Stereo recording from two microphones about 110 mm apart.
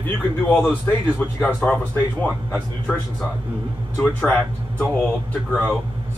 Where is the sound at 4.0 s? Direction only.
10° left (ahead or behind).